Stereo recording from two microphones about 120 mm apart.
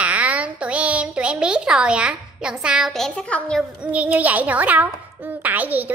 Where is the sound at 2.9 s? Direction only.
5° left (ahead or behind).